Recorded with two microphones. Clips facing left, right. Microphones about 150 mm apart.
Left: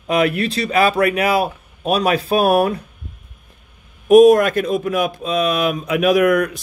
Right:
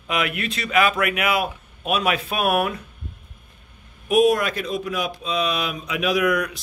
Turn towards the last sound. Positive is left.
turn(degrees=50)  # may be behind; listen again after turning